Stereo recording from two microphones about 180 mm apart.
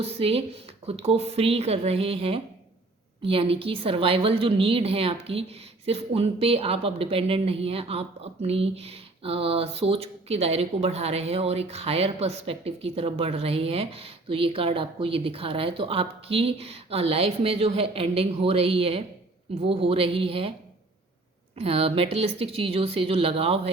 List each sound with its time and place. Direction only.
0.0 s a woman's voice: 35° right (ahead or behind)
21.6 s a woman's voice: 35° right (ahead or behind)